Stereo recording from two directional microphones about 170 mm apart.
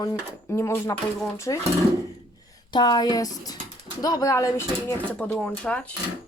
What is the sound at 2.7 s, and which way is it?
Speech, 25° left (ahead or behind).